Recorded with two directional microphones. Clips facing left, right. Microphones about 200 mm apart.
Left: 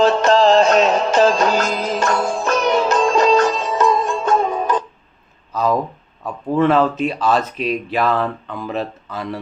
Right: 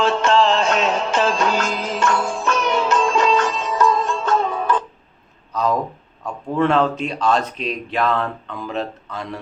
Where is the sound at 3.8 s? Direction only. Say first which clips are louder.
Even; 15° left (ahead or behind).